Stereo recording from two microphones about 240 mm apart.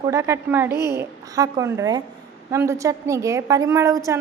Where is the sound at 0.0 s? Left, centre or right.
Centre.